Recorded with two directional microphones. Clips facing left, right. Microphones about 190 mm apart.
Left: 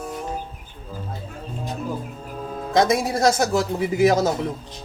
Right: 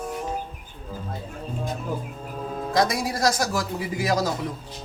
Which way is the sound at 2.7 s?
25° left (ahead or behind).